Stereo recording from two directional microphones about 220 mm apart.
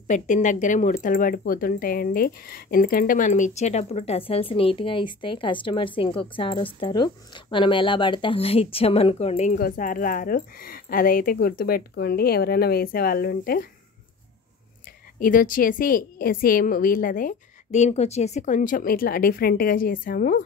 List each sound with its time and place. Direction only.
0.1 s speech: 35° left (ahead or behind)
15.1 s speech: 40° left (ahead or behind)